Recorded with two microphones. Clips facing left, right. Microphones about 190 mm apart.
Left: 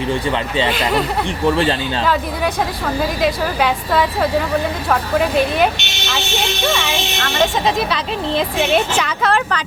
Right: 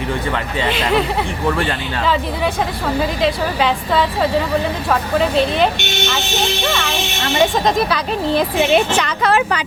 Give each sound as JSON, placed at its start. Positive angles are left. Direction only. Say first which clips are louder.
{"t": 1.5, "sound": "speech", "louder": "left 4 dB", "side_deg": 25}
{"t": 3.0, "sound": "speech", "louder": "even", "side_deg": 5}
{"t": 7.6, "sound": "speech", "louder": "right 2 dB", "side_deg": 0}